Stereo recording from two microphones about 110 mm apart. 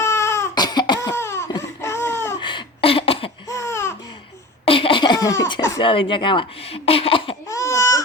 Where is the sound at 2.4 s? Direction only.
50° left (ahead or behind).